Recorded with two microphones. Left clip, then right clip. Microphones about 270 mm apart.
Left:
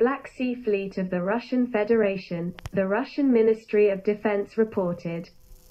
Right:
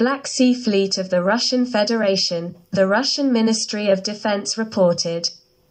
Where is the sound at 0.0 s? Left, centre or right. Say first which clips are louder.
Right 6 dB; right.